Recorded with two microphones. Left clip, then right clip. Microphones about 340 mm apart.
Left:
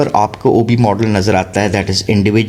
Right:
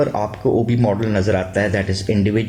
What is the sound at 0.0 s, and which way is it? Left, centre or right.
Speech, left.